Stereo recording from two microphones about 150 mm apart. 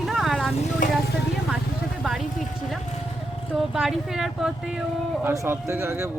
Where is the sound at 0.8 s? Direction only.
60° left (ahead or behind).